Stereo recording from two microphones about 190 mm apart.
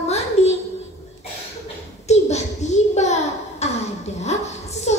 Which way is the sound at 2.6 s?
35° left (ahead or behind).